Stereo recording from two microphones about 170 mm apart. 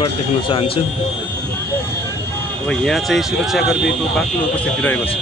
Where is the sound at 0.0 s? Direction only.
30° left (ahead or behind).